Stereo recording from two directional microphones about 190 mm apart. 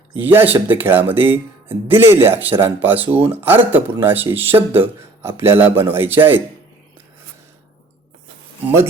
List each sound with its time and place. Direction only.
0.2 s speech: 10° right (ahead or behind)
8.6 s speech: 10° right (ahead or behind)